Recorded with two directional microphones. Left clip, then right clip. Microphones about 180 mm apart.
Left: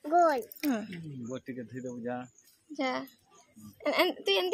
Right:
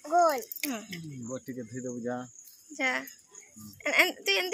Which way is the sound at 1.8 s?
50° right (ahead or behind).